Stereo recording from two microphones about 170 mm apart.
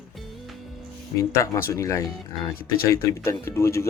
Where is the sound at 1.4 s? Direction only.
15° left (ahead or behind).